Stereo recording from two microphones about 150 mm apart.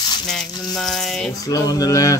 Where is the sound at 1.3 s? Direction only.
25° left (ahead or behind).